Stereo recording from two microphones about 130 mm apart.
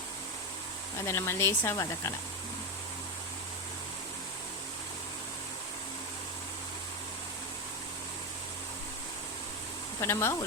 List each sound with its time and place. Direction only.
0.9 s speech: 20° left (ahead or behind)
10.0 s speech: 20° left (ahead or behind)